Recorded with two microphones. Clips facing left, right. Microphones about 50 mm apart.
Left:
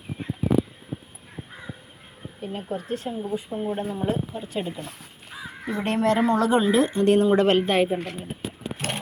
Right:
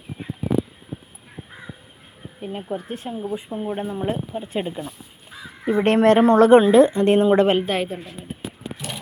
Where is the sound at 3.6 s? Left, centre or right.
Right.